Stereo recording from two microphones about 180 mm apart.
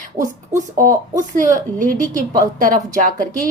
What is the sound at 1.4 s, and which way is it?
A woman's voice, 50° right (ahead or behind).